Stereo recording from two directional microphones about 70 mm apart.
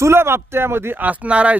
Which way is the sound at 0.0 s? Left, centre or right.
Right.